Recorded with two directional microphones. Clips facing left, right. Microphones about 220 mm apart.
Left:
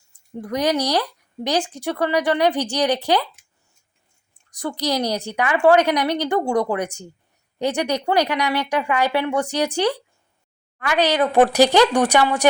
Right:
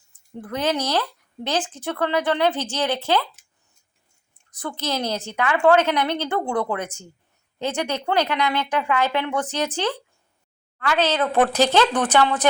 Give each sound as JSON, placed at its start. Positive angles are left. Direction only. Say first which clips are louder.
{"t": 0.3, "sound": "a woman's voice", "louder": "left 3 dB", "side_deg": 15}
{"t": 4.5, "sound": "a woman's voice", "louder": "left 4 dB", "side_deg": 15}